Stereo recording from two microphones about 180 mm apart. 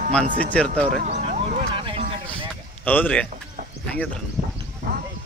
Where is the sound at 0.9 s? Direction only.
45° right (ahead or behind); by 2.1 s 30° right (ahead or behind).